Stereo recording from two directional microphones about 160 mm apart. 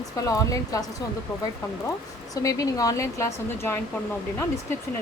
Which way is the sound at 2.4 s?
20° left (ahead or behind).